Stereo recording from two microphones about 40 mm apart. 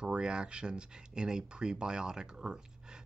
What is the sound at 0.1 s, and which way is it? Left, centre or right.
Speech, right.